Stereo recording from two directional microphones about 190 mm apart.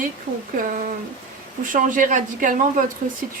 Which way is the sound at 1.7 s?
45° right (ahead or behind).